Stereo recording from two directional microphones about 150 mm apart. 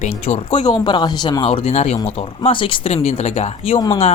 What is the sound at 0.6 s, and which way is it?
Speech, 30° left (ahead or behind).